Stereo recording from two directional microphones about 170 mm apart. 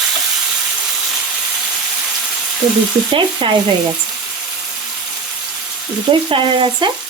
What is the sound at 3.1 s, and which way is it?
Frying, 30° right (ahead or behind).